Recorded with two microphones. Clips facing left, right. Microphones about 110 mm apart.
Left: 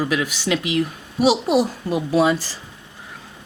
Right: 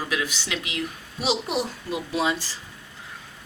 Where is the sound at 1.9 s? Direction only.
50° left (ahead or behind).